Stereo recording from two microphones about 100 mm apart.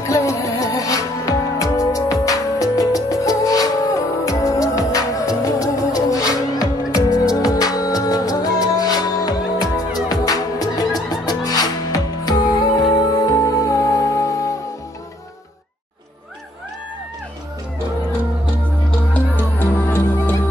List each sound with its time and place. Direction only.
0.0 s music: 30° left (ahead or behind)
18.9 s music: 15° left (ahead or behind)